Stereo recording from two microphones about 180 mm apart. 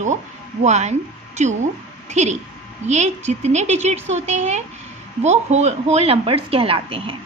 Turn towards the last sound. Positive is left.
turn(degrees=-30)  # may be behind; listen again after turning